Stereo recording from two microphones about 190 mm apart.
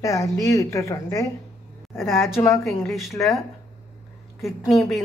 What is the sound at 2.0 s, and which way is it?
Speech, centre (ahead or behind).